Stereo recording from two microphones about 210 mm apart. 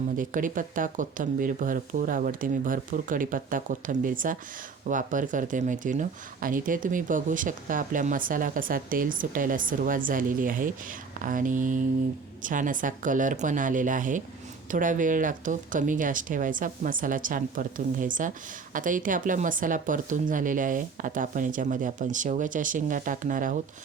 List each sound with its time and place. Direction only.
0.2 s speech: 40° right (ahead or behind)